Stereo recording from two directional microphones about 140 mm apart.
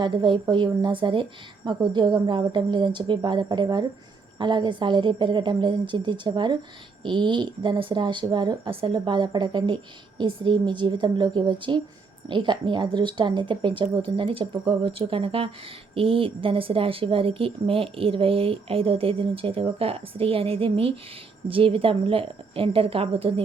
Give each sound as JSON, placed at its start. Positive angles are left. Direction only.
{"t": 0.0, "sound": "speech", "side_deg": -35}